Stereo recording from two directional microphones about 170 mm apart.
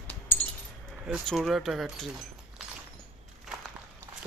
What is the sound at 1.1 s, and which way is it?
Speech, centre (ahead or behind).